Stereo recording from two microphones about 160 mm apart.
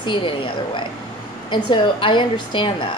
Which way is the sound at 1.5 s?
30° left (ahead or behind).